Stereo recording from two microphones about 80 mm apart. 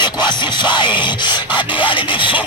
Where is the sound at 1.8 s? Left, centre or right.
Left.